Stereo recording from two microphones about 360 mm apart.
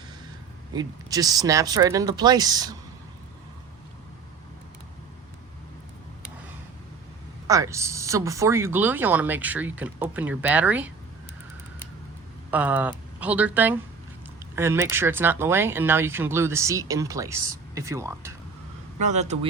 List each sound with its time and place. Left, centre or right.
0.7 s speech: centre
7.4 s speech: centre
12.5 s speech: centre
18.9 s speech: centre